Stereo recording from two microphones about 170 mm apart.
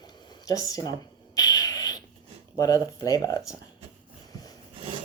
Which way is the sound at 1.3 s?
20° left (ahead or behind).